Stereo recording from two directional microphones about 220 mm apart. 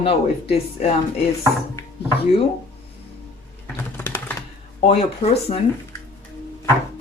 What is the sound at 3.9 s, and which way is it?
Typing, 10° left (ahead or behind).